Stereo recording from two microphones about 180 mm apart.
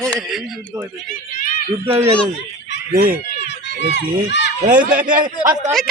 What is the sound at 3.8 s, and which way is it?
Speech, 75° left (ahead or behind).